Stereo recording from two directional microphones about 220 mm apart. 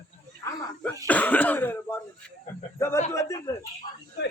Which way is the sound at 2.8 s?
10° left (ahead or behind).